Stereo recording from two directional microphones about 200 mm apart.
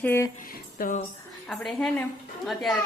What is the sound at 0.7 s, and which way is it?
Speech, 45° left (ahead or behind).